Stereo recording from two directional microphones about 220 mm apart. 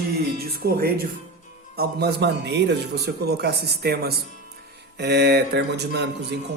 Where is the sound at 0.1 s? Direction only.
45° right (ahead or behind).